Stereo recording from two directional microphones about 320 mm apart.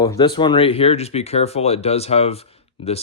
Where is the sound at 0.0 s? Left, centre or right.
Centre.